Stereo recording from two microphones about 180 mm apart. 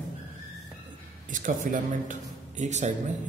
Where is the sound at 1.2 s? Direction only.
45° right (ahead or behind).